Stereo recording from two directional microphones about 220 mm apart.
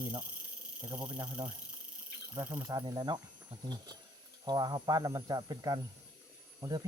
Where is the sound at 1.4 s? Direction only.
20° right (ahead or behind).